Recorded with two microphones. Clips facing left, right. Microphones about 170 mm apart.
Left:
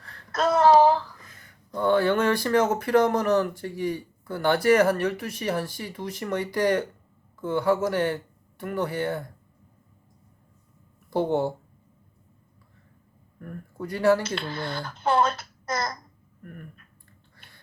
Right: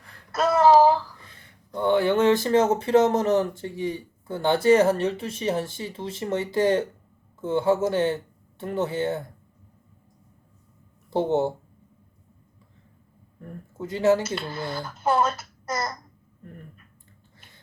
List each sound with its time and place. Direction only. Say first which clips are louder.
0.3 s a sound: right 1 dB; 5° right (ahead or behind)
1.2 s speech: even; 30° right (ahead or behind)
11.1 s speech: right 1 dB; 20° right (ahead or behind)
13.4 s speech: even; 20° right (ahead or behind)
14.3 s a child's voice: right 1 dB; 5° right (ahead or behind)
16.4 s speech: left 1 dB; 25° right (ahead or behind)